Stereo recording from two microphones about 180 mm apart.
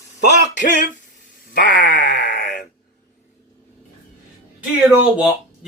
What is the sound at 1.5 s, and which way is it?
Groan, 50° left (ahead or behind).